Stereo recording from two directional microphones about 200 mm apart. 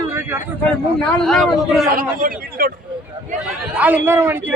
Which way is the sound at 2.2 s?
45° right (ahead or behind).